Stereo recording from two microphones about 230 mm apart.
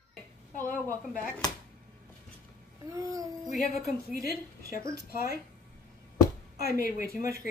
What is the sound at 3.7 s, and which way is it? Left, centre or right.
Speech, centre.